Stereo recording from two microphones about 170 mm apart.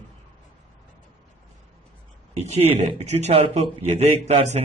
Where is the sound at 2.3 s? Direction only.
40° right (ahead or behind).